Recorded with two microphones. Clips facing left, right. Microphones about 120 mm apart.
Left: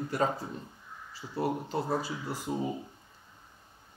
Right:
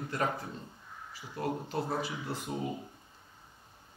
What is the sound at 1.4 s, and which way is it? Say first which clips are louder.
Speech: left 3 dB; 20° left (ahead or behind).